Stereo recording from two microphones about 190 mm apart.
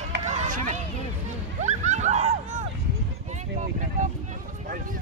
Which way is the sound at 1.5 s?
40° right (ahead or behind).